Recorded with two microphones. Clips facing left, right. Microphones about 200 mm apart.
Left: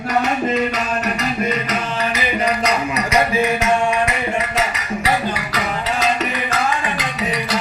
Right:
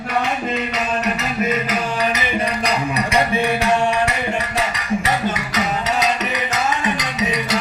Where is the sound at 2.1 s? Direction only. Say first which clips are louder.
Left 2 dB; 30° right (ahead or behind).